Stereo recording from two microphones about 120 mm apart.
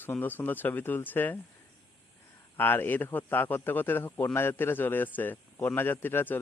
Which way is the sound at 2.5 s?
15° left (ahead or behind).